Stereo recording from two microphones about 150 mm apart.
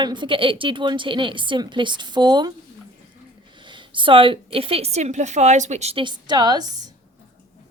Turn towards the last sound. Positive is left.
turn(degrees=-25)  # may be behind; listen again after turning